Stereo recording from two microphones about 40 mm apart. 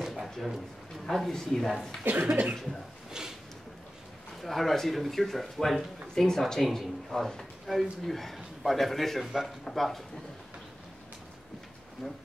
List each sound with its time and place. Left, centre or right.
0.0 s a sound: centre
1.0 s speech: centre
2.1 s cough: right
3.1 s a sound: centre
4.4 s speech: centre
7.7 s a man's voice: centre
8.0 s speech: centre
9.2 s a man's voice: centre
9.7 s speech: centre
12.0 s speech: centre